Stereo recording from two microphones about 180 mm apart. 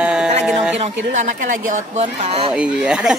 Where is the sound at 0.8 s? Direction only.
40° right (ahead or behind).